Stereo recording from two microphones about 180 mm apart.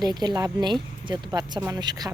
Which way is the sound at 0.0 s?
20° right (ahead or behind).